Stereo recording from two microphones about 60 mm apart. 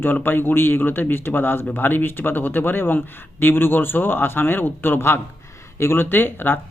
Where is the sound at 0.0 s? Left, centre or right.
Left.